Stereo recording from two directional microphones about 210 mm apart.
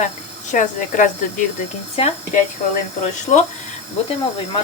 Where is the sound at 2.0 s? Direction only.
25° left (ahead or behind).